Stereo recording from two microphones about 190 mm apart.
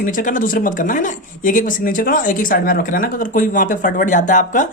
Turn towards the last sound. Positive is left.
turn(degrees=40)  # may be behind; listen again after turning